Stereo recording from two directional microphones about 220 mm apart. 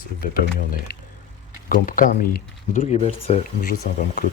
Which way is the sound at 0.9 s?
45° left (ahead or behind).